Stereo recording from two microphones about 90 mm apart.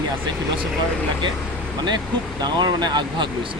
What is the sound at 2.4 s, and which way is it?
Speech, 50° right (ahead or behind).